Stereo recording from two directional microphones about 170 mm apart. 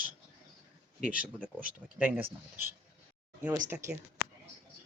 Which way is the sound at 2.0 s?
10° right (ahead or behind).